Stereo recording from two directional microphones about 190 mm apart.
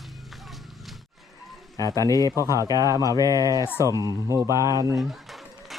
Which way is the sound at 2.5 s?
20° right (ahead or behind).